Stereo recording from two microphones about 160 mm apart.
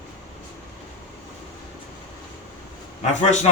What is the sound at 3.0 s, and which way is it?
Speech, 50° left (ahead or behind).